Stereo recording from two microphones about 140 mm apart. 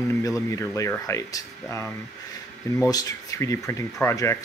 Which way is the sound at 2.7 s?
25° left (ahead or behind).